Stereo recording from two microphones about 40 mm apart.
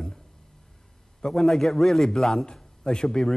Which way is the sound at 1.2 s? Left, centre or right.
Centre.